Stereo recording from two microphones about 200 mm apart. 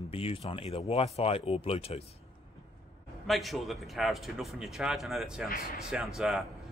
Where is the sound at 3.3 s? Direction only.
Centre (ahead or behind).